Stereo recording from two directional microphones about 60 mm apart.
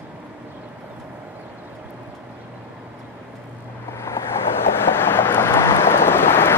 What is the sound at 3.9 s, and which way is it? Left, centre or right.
Vehicle, left.